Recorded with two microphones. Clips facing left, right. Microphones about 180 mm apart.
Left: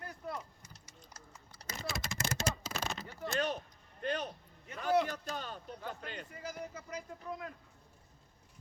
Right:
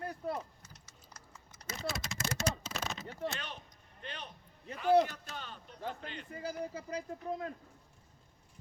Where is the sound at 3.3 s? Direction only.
40° left (ahead or behind).